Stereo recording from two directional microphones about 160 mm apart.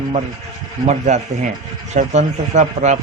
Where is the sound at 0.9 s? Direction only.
45° right (ahead or behind).